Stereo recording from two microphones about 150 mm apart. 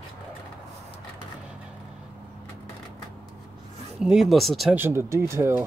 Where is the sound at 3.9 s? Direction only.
Centre (ahead or behind).